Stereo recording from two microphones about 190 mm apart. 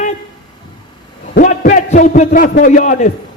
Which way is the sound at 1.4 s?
45° left (ahead or behind).